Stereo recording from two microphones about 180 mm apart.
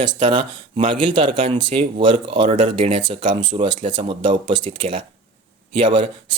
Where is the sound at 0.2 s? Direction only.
25° right (ahead or behind).